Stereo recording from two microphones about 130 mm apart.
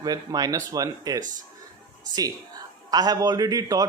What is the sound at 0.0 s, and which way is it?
A man's voice, 30° right (ahead or behind).